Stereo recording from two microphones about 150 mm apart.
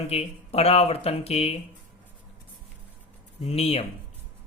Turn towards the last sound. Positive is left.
turn(degrees=45)  # may be behind; listen again after turning